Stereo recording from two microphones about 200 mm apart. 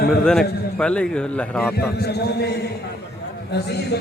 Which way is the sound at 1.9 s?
55° left (ahead or behind).